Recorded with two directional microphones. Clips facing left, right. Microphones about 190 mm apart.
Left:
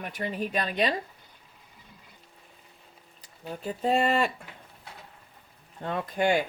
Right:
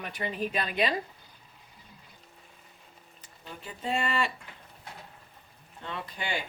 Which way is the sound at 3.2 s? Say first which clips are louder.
Left 8 dB; 40° left (ahead or behind).